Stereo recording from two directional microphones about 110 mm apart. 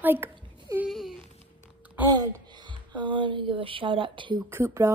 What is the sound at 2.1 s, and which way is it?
Speech, 40° right (ahead or behind).